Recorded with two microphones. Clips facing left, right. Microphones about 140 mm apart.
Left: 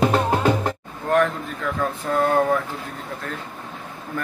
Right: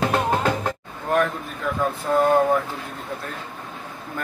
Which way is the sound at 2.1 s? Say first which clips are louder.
Right 2 dB; 25° right (ahead or behind).